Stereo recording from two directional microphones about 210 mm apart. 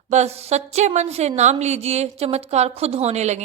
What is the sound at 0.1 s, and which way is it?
A woman's voice, 30° right (ahead or behind).